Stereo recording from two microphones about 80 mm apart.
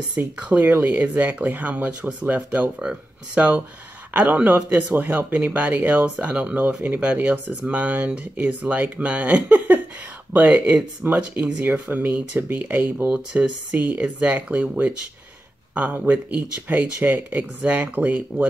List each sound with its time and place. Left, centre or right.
0.2 s speech: right
11.0 s speech: centre
13.1 s speech: centre